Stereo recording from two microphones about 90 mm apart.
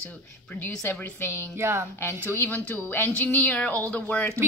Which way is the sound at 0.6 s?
20° left (ahead or behind).